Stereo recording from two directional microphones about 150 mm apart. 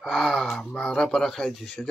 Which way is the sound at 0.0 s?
Centre (ahead or behind).